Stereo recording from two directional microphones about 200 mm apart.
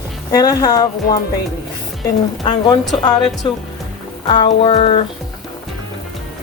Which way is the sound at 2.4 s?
20° left (ahead or behind).